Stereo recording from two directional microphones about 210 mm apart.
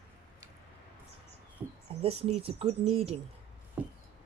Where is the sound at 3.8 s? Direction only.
5° right (ahead or behind).